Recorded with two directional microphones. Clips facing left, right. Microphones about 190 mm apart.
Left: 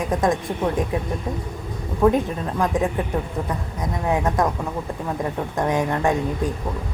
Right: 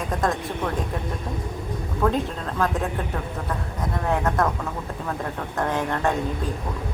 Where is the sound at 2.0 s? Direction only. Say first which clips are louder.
Left 5 dB; 15° left (ahead or behind).